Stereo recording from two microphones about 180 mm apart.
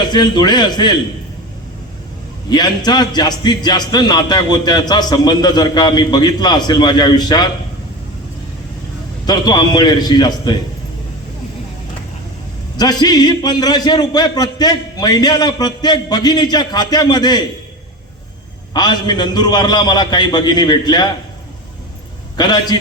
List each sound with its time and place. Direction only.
0.0 s a man's voice: 25° left (ahead or behind)
2.5 s a man's voice: 25° left (ahead or behind)
9.2 s a man's voice: 25° left (ahead or behind)
12.7 s a man's voice: 20° left (ahead or behind)
18.7 s a man's voice: 25° left (ahead or behind)
22.4 s a man's voice: 25° left (ahead or behind)